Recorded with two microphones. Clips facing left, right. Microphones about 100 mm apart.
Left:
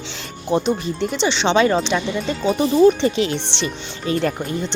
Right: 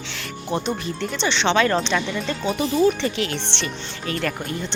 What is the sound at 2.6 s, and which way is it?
Speech, 25° left (ahead or behind).